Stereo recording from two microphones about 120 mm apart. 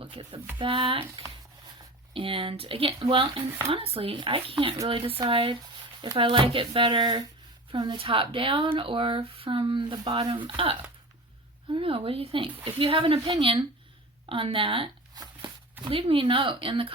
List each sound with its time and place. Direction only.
0.0 s speech: 50° right (ahead or behind)
15.1 s a sound: 35° right (ahead or behind)
15.8 s speech: 50° right (ahead or behind)